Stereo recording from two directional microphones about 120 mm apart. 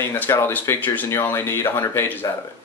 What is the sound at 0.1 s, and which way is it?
Speech, 15° left (ahead or behind).